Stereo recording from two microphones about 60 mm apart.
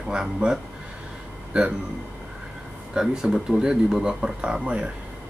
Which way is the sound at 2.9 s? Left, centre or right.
Centre.